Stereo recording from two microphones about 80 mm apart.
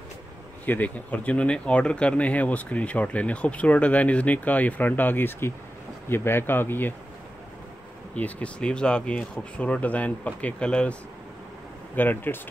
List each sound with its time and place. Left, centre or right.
0.7 s speech: centre
8.1 s speech: centre